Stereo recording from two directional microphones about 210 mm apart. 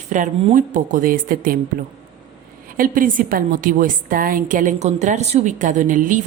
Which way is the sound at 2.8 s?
40° right (ahead or behind).